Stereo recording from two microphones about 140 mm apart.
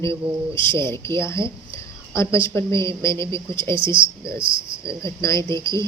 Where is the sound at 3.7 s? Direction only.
35° right (ahead or behind).